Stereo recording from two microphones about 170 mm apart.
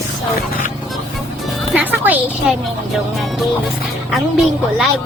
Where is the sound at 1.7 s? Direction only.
10° right (ahead or behind).